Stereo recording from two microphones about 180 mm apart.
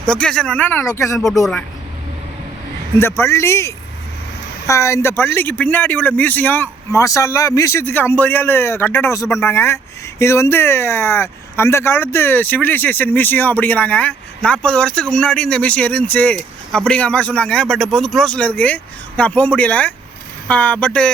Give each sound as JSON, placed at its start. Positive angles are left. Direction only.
{"t": 0.0, "sound": "speech", "side_deg": 5}
{"t": 3.0, "sound": "speech", "side_deg": 15}